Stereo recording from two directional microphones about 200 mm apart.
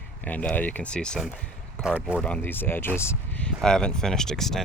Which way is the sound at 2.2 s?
10° left (ahead or behind).